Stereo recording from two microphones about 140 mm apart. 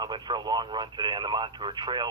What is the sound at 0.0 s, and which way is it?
Speech, 30° right (ahead or behind).